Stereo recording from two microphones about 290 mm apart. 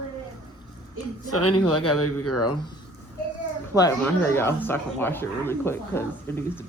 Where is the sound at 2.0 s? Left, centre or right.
Left.